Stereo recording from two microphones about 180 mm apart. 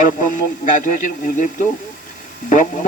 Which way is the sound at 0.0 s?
45° left (ahead or behind).